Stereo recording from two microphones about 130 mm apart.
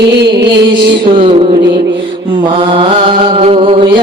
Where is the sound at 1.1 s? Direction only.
45° right (ahead or behind).